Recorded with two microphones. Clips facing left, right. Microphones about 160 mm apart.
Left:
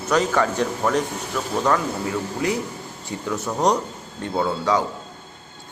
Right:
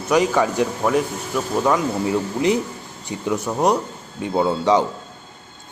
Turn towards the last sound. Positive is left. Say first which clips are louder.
# right 4 dB
turn(degrees=-20)  # may be behind; listen again after turning